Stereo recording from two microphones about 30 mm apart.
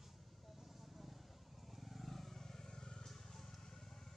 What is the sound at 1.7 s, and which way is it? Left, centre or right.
Vehicle, centre.